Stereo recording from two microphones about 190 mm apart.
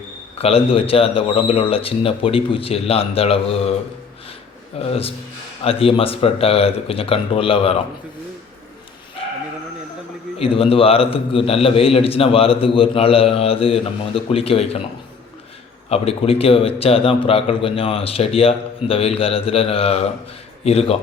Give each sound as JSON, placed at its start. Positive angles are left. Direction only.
{"t": 0.3, "sound": "a man's voice", "side_deg": 30}
{"t": 4.8, "sound": "speech", "side_deg": 30}
{"t": 10.3, "sound": "a man's voice", "side_deg": 30}
{"t": 15.9, "sound": "a man's voice", "side_deg": 30}